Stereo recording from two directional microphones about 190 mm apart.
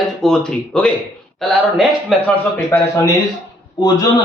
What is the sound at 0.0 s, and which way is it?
A man's voice, centre (ahead or behind).